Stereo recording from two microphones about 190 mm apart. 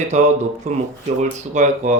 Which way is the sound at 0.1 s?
40° right (ahead or behind).